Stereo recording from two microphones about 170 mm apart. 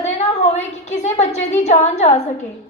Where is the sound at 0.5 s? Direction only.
40° left (ahead or behind).